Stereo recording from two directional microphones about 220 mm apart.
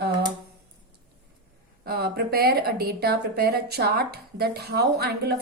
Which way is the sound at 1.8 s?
45° right (ahead or behind).